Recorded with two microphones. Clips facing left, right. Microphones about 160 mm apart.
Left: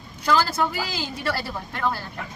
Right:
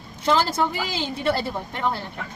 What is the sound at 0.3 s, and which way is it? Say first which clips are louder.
Speech: right 1 dB; 25° right (ahead or behind).